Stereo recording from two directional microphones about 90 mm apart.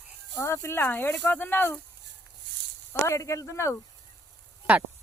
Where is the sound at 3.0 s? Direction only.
35° left (ahead or behind).